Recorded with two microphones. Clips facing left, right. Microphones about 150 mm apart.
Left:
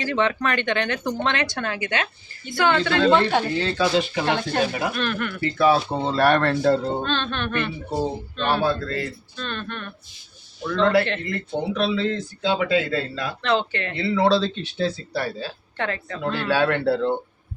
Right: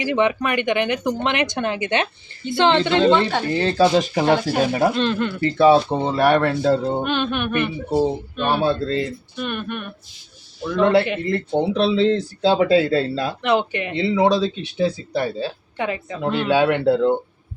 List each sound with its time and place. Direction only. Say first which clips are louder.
0.0 s speech: right 3 dB; 15° right (ahead or behind)
3.1 s speech: right 1 dB; centre (ahead or behind)
3.6 s speech: right 6 dB; 25° right (ahead or behind)
3.9 s speech: right 5 dB; 40° right (ahead or behind)
4.9 s speech: right 5 dB; 20° right (ahead or behind)
11.3 s speech: right 6 dB; 30° right (ahead or behind)
13.4 s speech: right 2 dB; 15° right (ahead or behind)